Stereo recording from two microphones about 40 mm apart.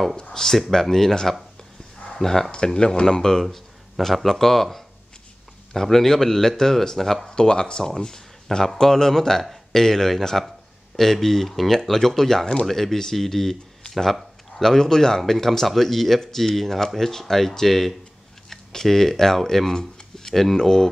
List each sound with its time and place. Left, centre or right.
0.1 s speech: centre
2.5 s speech: left
7.2 s speech: left
8.0 s a sound: centre
8.7 s speech: centre